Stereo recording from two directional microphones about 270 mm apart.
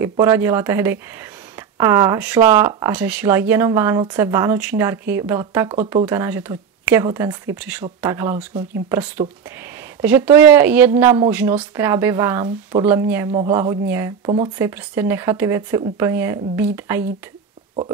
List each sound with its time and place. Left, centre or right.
0.0 s speech: centre
13.3 s speech: centre
13.6 s speech: centre